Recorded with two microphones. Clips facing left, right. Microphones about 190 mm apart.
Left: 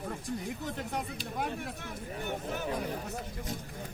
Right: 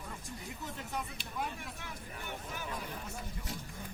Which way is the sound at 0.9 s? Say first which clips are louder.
Left 1 dB; 50° left (ahead or behind).